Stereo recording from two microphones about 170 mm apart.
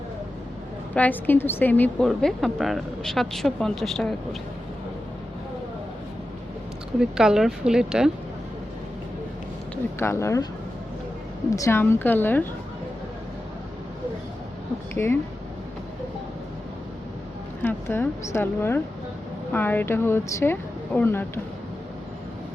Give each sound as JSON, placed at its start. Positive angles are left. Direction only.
{"t": 0.9, "sound": "a woman's voice", "side_deg": 10}
{"t": 7.0, "sound": "a woman's voice", "side_deg": -5}
{"t": 10.0, "sound": "speech", "side_deg": 15}
{"t": 11.5, "sound": "speech", "side_deg": 15}
{"t": 14.9, "sound": "speech", "side_deg": 15}
{"t": 17.6, "sound": "speech", "side_deg": 15}